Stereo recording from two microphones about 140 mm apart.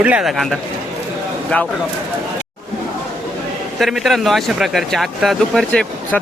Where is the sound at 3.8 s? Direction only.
Centre (ahead or behind).